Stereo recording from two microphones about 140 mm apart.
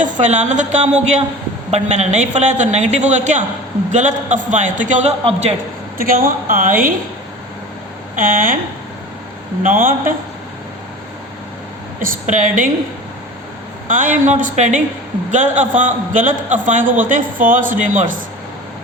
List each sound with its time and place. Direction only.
0.0 s a woman's voice: 60° right (ahead or behind)
5.2 s a man's voice: 45° right (ahead or behind)
6.0 s a woman's voice: 90° right
8.1 s speech: 80° right
9.6 s a woman's voice: 75° right (ahead or behind)
11.9 s a woman's voice: 70° right (ahead or behind)
13.8 s a woman's voice: 70° right (ahead or behind)